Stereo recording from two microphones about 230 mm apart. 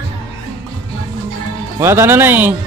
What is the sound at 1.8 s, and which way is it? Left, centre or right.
Speech, centre.